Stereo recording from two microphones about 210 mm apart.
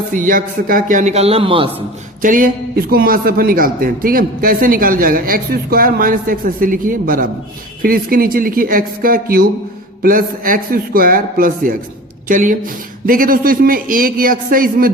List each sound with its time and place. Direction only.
0.1 s a man's voice: 40° right (ahead or behind)
2.2 s a man's voice: 40° right (ahead or behind)